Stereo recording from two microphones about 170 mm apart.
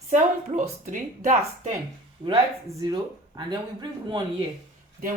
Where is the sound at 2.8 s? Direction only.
25° right (ahead or behind).